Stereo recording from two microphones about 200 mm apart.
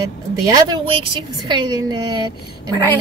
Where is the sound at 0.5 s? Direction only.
25° right (ahead or behind).